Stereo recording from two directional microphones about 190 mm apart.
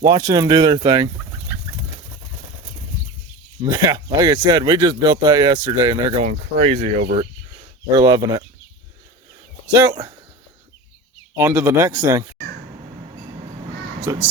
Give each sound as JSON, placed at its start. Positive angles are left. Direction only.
{"t": 0.0, "sound": "speech", "side_deg": -20}
{"t": 3.6, "sound": "speech", "side_deg": -20}
{"t": 6.2, "sound": "speech", "side_deg": -35}
{"t": 7.9, "sound": "speech", "side_deg": -20}
{"t": 9.7, "sound": "speech", "side_deg": -20}
{"t": 11.3, "sound": "speech", "side_deg": -15}
{"t": 14.0, "sound": "speech", "side_deg": -10}